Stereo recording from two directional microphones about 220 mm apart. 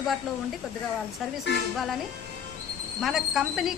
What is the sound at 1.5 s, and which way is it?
Speech, 50° left (ahead or behind).